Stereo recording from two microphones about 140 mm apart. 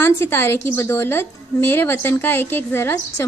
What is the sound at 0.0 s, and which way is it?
A woman's voice, 15° left (ahead or behind).